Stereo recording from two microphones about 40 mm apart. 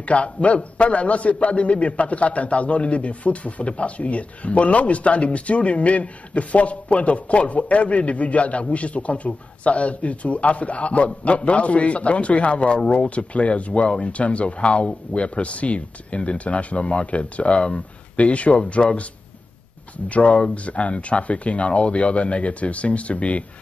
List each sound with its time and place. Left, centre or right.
0.0 s a man's voice: left
20.1 s a man's voice: left